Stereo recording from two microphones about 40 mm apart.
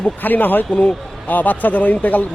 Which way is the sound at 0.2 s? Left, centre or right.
Left.